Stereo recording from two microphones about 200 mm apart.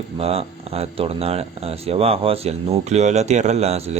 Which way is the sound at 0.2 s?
30° right (ahead or behind).